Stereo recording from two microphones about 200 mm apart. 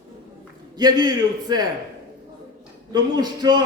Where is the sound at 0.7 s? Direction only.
20° right (ahead or behind).